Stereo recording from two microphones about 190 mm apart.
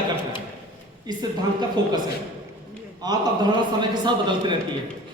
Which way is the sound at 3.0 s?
20° right (ahead or behind).